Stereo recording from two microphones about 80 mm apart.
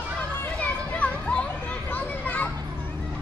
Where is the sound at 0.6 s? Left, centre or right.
Centre.